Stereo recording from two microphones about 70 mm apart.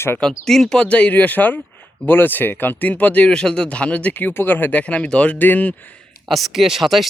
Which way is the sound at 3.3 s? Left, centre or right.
Centre.